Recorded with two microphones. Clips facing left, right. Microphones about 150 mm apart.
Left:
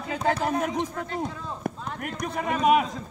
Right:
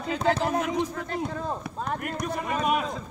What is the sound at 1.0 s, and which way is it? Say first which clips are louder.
Speech: right 1 dB; 45° right (ahead or behind).